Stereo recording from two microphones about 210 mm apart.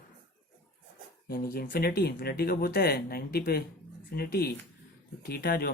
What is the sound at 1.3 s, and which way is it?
Speech, 45° left (ahead or behind).